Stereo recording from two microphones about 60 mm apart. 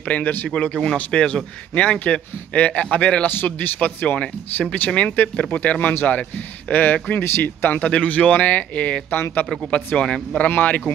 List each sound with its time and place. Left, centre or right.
0.0 s a man's voice: left
0.5 s a man's voice: centre
3.3 s speech: left
4.2 s a man's voice: centre
7.2 s speech: left
7.8 s a man's voice: left
9.1 s speech: left
9.7 s a man's voice: left